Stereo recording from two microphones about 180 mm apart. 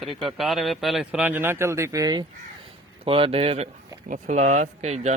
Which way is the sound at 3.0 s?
30° right (ahead or behind).